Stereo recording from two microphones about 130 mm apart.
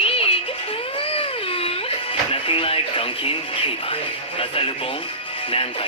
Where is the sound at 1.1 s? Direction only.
50° left (ahead or behind).